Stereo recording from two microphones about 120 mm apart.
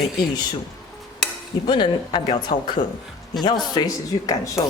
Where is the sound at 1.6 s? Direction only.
40° left (ahead or behind).